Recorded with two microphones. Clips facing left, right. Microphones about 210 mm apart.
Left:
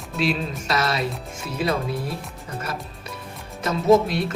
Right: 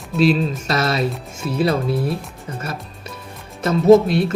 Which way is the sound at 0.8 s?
30° right (ahead or behind).